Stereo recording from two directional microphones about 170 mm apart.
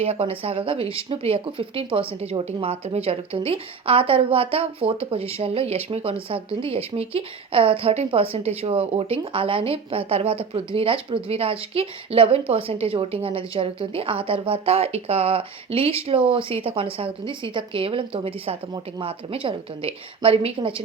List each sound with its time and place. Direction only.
0.0 s speech: 35° right (ahead or behind)